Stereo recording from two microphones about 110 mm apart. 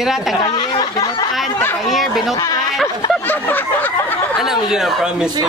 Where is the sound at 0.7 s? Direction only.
35° left (ahead or behind).